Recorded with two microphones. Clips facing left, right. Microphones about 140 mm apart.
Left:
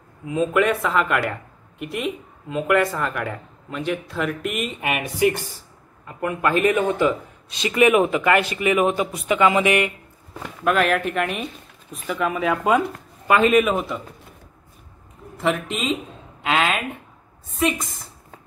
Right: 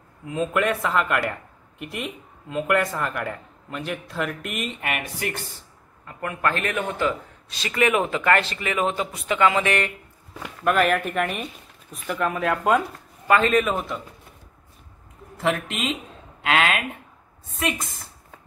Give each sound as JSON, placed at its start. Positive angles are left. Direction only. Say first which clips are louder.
{"t": 0.3, "sound": "speech", "louder": "left 4 dB", "side_deg": 0}
{"t": 4.8, "sound": "a man's voice", "louder": "left 12 dB", "side_deg": 15}
{"t": 10.6, "sound": "a man's voice", "louder": "left 1 dB", "side_deg": 0}
{"t": 15.4, "sound": "speech", "louder": "left 2 dB", "side_deg": 0}